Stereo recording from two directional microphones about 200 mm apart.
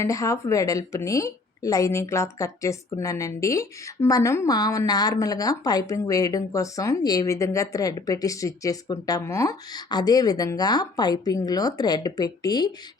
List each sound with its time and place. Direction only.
0.0 s a woman's voice: 15° left (ahead or behind)